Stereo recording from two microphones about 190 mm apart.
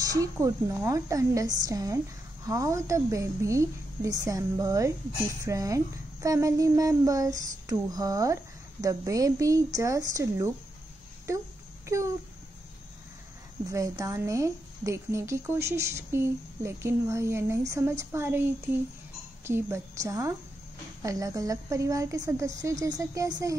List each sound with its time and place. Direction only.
0.0 s speech: 20° right (ahead or behind)
13.7 s speech: 15° right (ahead or behind)